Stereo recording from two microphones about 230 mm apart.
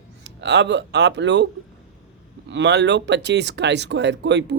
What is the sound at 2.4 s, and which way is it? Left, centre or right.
Speech, right.